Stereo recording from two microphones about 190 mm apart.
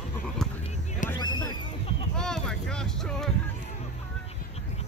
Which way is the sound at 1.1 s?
20° left (ahead or behind).